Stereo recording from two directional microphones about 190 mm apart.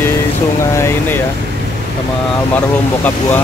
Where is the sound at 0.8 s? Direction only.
15° left (ahead or behind).